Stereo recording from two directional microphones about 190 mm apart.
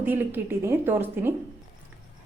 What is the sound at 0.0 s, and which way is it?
A woman's voice, 10° right (ahead or behind).